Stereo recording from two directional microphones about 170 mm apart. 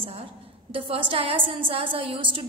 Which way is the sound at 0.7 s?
30° right (ahead or behind).